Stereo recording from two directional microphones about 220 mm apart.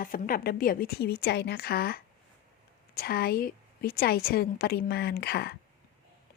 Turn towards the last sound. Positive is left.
turn(degrees=45)  # may be behind; listen again after turning